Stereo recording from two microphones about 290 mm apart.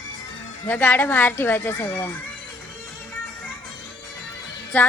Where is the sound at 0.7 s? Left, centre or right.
Centre.